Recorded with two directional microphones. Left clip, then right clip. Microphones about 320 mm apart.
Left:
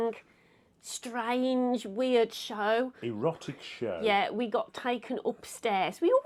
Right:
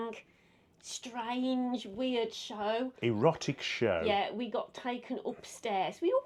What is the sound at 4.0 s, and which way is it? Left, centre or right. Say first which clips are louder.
Speech: left 4 dB; left.